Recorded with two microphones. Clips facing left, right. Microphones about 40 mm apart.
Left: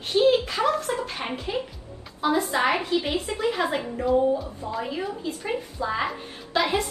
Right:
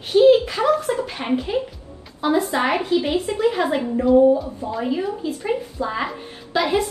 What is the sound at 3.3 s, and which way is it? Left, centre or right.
Speech, centre.